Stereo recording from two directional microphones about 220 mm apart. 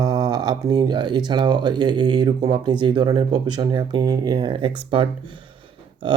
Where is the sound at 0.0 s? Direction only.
20° right (ahead or behind).